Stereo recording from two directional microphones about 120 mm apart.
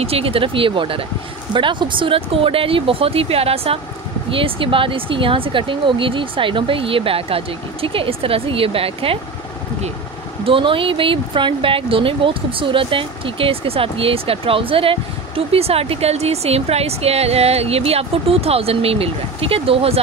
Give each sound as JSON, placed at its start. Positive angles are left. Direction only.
{"t": 0.0, "sound": "speech", "side_deg": -55}
{"t": 10.4, "sound": "speech", "side_deg": -45}